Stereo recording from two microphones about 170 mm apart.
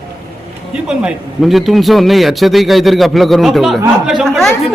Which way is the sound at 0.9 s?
5° right (ahead or behind).